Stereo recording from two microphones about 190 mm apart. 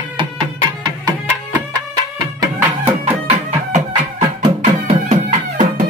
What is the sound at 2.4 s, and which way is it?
Music, 10° right (ahead or behind).